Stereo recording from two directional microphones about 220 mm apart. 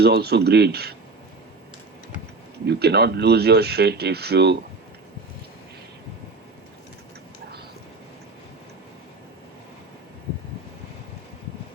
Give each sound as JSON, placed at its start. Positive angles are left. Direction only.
{"t": 0.0, "sound": "speech", "side_deg": -45}
{"t": 2.6, "sound": "speech", "side_deg": -50}